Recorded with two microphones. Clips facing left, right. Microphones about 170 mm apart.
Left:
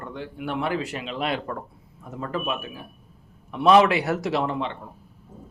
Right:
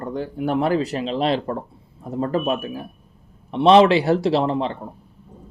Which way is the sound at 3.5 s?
25° right (ahead or behind).